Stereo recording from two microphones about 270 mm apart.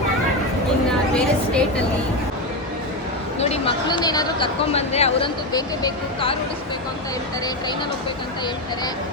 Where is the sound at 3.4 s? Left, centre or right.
Left.